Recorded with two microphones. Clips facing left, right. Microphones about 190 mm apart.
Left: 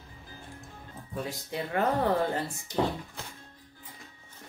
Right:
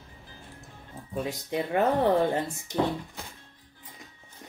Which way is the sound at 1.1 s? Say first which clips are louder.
Right 5 dB; 20° right (ahead or behind).